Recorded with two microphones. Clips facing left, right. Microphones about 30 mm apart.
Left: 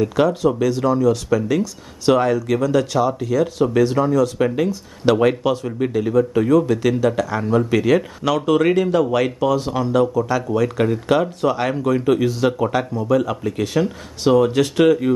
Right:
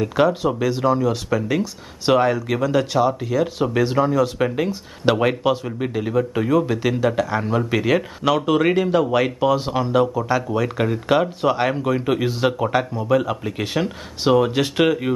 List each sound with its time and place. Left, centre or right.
0.0 s speech: centre